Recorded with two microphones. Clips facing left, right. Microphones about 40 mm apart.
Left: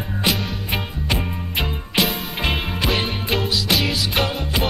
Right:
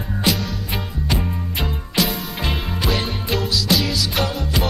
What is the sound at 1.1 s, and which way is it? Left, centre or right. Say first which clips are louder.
Music: left 1 dB; left.